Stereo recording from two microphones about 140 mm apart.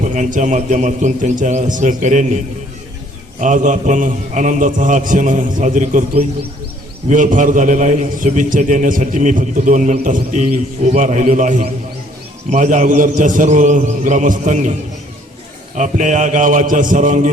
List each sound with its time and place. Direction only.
0.0 s a man's voice: 60° right (ahead or behind)
3.4 s a man's voice: 65° right (ahead or behind)